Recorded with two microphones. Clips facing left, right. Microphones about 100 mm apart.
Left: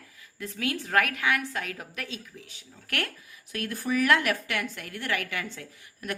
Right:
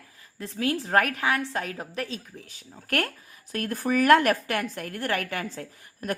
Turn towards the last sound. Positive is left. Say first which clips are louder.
# right 4 dB
turn(degrees=-40)  # may be behind; listen again after turning